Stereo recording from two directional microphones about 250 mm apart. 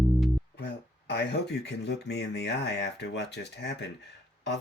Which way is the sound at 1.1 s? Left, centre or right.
Left.